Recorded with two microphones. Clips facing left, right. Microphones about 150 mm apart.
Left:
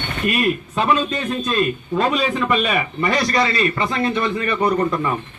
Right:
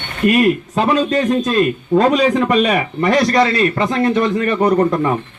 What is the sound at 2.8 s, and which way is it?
A man's voice, 50° right (ahead or behind).